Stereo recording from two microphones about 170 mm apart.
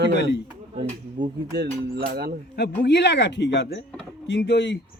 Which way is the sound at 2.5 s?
75° left (ahead or behind).